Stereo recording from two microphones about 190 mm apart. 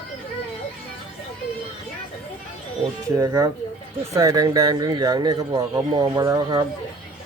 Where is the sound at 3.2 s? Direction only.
20° right (ahead or behind).